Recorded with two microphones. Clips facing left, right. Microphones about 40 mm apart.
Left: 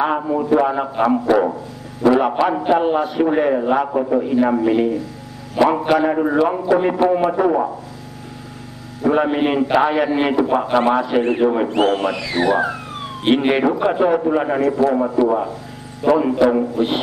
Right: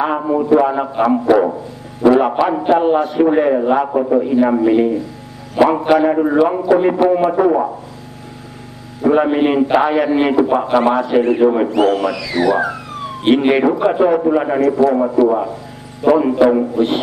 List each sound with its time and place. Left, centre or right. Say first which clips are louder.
0.2 s a man's voice: right 3 dB; centre
9.0 s a man's voice: right 3 dB; centre
11.7 s speech: right 3 dB; left
13.2 s a man's voice: right 3 dB; centre